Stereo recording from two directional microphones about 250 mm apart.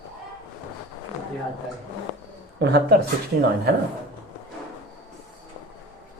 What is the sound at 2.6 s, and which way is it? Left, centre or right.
Speech, right.